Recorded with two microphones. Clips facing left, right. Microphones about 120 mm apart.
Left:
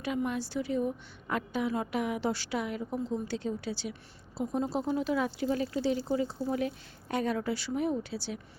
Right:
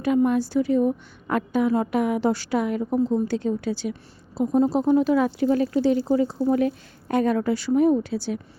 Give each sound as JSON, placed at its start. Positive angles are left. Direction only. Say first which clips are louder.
{"t": 0.0, "sound": "a woman's voice", "louder": "right 12 dB", "side_deg": -45}